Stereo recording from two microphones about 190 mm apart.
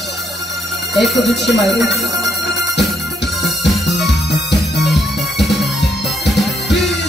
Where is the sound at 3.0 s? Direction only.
65° left (ahead or behind).